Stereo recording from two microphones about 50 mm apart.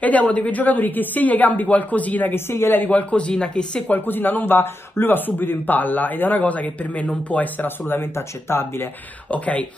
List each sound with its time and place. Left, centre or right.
0.0 s a man's voice: left
2.3 s speech: left
2.8 s speech: left
3.9 s a man's voice: left
7.6 s speech: left
9.3 s speech: left